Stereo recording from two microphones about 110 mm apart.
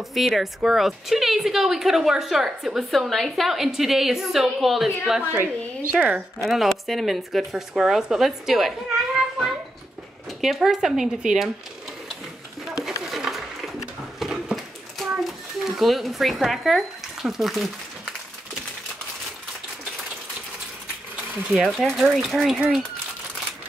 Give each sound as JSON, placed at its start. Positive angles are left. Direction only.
{"t": 0.1, "sound": "a woman's voice", "side_deg": 0}
{"t": 5.4, "sound": "speech", "side_deg": -20}
{"t": 5.9, "sound": "a woman's voice", "side_deg": -10}
{"t": 12.6, "sound": "a sound", "side_deg": -5}
{"t": 21.5, "sound": "a woman's voice", "side_deg": 0}